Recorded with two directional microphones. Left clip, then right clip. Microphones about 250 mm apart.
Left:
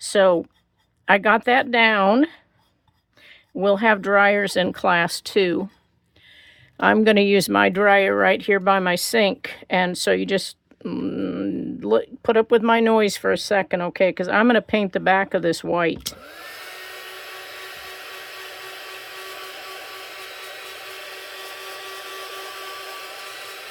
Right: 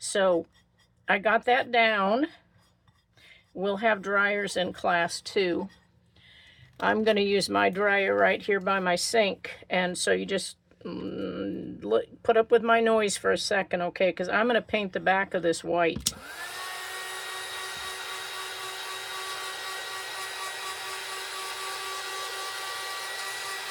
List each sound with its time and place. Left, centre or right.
0.0 s speech: left
3.6 s speech: left
6.7 s speech: left
16.2 s hair dryer: centre